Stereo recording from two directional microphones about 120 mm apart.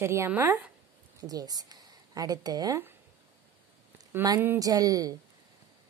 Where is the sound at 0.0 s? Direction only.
20° right (ahead or behind).